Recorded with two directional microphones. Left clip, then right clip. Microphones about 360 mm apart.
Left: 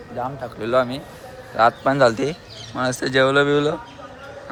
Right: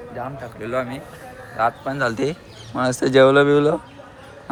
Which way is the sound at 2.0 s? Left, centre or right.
Centre.